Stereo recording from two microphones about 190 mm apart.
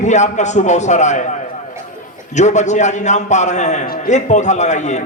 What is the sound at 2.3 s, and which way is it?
A man's voice, 40° left (ahead or behind).